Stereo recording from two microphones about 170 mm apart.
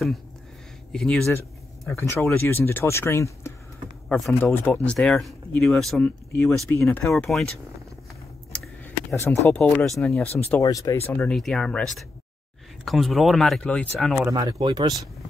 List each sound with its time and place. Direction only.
0.9 s speech: 5° left (ahead or behind)
1.9 s speech: 15° left (ahead or behind)
9.1 s speech: 15° left (ahead or behind)
10.2 s speech: 35° left (ahead or behind)
10.6 s speech: 20° left (ahead or behind); by 14.1 s 5° left (ahead or behind)
14.3 s speech: 25° right (ahead or behind)